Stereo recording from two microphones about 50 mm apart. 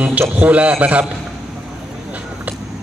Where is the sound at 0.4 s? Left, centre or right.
Right.